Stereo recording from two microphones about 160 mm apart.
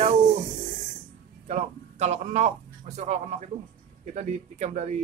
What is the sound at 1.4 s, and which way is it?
A man's voice, 45° right (ahead or behind).